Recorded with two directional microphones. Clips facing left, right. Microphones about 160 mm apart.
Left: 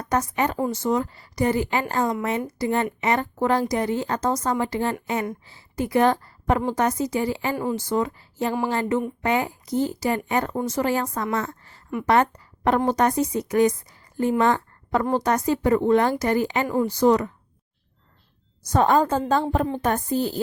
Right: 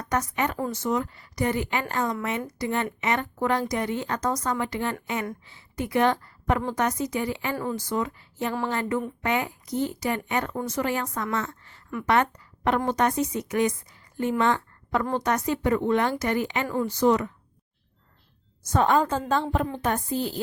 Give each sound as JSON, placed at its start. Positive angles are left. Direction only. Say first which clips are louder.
{"t": 0.0, "sound": "a woman's voice", "louder": "left 3 dB", "side_deg": 30}
{"t": 7.5, "sound": "a sound", "louder": "left 4 dB", "side_deg": 20}
{"t": 7.9, "sound": "speech", "louder": "left 4 dB", "side_deg": 30}
{"t": 8.7, "sound": "a sound", "louder": "left 4 dB", "side_deg": 30}
{"t": 9.2, "sound": "a woman's voice", "louder": "left 3 dB", "side_deg": 30}
{"t": 18.7, "sound": "speech", "louder": "left 3 dB", "side_deg": 40}